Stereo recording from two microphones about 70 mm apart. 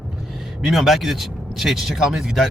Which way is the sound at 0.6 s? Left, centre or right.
Centre.